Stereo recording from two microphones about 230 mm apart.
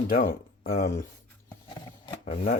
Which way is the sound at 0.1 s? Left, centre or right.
Left.